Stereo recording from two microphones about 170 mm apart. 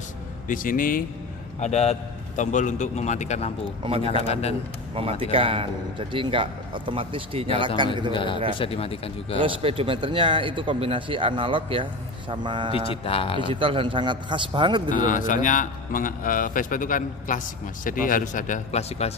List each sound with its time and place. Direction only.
0.5 s speech: 55° left (ahead or behind)
1.6 s a man's voice: 40° left (ahead or behind)
4.9 s a man's voice: 35° right (ahead or behind)
8.1 s a man's voice: 30° left (ahead or behind)
9.4 s speech: 30° right (ahead or behind)
12.7 s speech: 35° left (ahead or behind)
13.5 s speech: 30° right (ahead or behind)
14.9 s a man's voice: 50° left (ahead or behind)